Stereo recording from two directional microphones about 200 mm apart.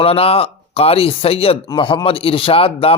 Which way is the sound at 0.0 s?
30° left (ahead or behind).